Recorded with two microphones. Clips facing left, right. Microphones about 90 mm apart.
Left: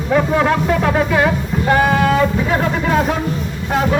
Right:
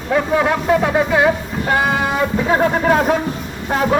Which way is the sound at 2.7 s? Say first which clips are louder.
Right 2 dB; 35° right (ahead or behind).